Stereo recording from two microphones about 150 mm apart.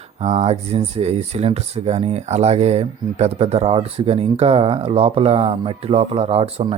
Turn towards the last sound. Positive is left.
turn(degrees=-40)  # may be behind; listen again after turning